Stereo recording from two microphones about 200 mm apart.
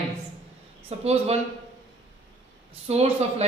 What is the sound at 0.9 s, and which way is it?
Speech, 30° right (ahead or behind).